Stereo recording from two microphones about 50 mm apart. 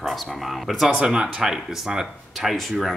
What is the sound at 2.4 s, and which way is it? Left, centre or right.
Speech, centre.